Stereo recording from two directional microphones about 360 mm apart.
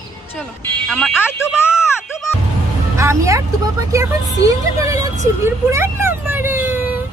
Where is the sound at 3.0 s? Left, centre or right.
Centre.